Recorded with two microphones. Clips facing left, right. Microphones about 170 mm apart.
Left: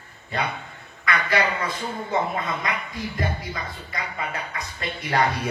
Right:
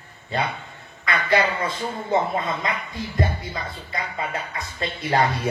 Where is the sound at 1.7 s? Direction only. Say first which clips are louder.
Right 3 dB; 25° right (ahead or behind).